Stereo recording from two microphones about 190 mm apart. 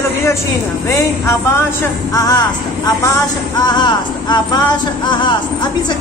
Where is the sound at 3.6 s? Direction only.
25° left (ahead or behind).